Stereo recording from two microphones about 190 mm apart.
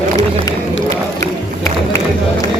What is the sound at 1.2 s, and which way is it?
Crowd, 15° left (ahead or behind).